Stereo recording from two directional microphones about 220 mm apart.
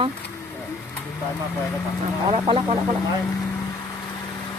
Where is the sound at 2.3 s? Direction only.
25° right (ahead or behind).